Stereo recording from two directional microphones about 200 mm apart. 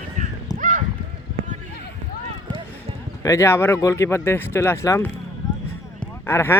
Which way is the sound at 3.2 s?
15° left (ahead or behind).